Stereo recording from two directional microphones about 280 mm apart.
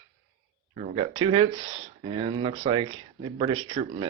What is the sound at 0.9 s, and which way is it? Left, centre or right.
Speech, centre.